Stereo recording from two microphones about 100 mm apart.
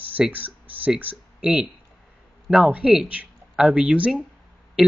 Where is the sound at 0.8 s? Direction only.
15° right (ahead or behind).